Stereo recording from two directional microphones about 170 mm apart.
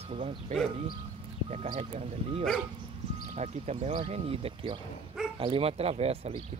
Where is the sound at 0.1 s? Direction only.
35° right (ahead or behind).